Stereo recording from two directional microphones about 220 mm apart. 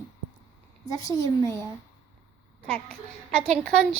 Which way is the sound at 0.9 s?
15° left (ahead or behind).